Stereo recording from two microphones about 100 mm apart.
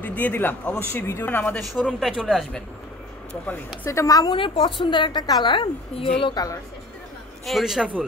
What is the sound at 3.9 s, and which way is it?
Speech, 35° left (ahead or behind).